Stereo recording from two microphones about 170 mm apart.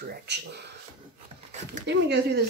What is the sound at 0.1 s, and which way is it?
Speech, 75° right (ahead or behind).